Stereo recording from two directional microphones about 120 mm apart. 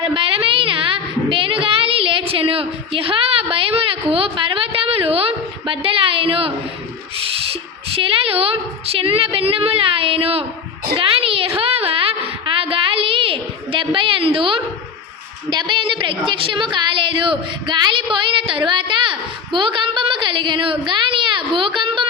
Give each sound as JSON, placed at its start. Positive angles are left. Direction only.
{"t": 0.0, "sound": "child singing", "side_deg": -50}
{"t": 7.2, "sound": "a woman's voice", "side_deg": -50}
{"t": 10.9, "sound": "a sound", "side_deg": -50}
{"t": 15.4, "sound": "a woman's voice", "side_deg": -40}